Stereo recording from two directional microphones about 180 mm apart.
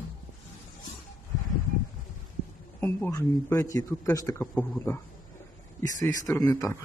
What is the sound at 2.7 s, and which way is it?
Speech, 15° left (ahead or behind).